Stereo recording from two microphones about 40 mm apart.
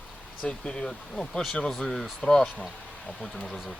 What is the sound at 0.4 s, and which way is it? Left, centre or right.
Speech, left.